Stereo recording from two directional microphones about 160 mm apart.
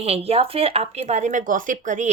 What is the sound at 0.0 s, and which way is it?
Speech, 40° right (ahead or behind).